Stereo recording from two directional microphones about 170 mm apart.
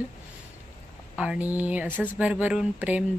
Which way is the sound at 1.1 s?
5° right (ahead or behind).